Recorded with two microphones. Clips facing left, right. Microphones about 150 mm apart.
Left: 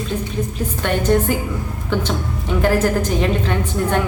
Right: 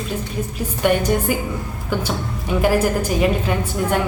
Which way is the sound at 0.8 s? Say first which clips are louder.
Right 4 dB; 10° right (ahead or behind).